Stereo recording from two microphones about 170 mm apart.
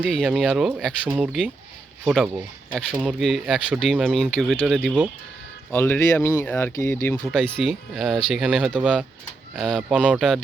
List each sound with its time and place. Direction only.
0.1 s speech: 5° left (ahead or behind)
1.0 s speech: 10° right (ahead or behind)
5.7 s speech: 10° left (ahead or behind)
6.7 s speech: 20° left (ahead or behind)
7.2 s speech: centre (ahead or behind)